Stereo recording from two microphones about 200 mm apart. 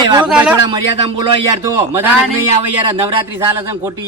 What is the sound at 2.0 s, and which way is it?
Speech, 10° right (ahead or behind).